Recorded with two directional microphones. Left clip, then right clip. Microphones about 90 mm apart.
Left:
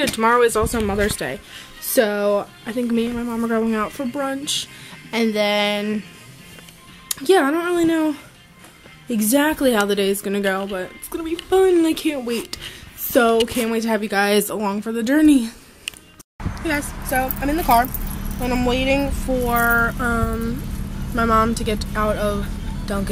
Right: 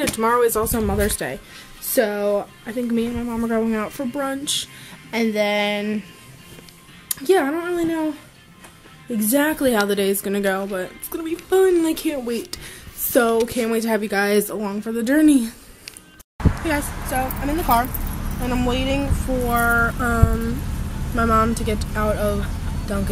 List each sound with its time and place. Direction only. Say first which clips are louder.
0.0 s speech: left 2 dB; centre (ahead or behind)
5.1 s a sound: left 1 dB; 5° left (ahead or behind)
7.1 s speech: left 2 dB; 5° left (ahead or behind)
7.4 s speech: left 4 dB; 20° left (ahead or behind)
9.1 s speech: left 1 dB; 10° left (ahead or behind)